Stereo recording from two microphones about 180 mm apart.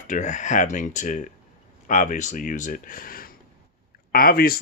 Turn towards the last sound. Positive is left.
turn(degrees=55)  # may be behind; listen again after turning